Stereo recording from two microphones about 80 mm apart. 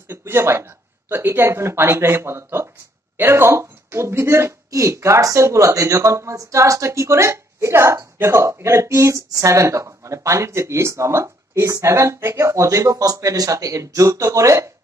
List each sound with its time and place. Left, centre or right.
0.1 s speech: right